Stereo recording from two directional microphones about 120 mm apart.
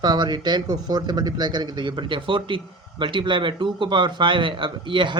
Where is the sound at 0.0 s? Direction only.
35° right (ahead or behind).